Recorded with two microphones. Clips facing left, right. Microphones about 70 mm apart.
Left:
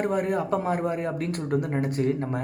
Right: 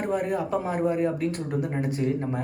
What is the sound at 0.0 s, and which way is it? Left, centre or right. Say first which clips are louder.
A man's voice: left 1 dB; left.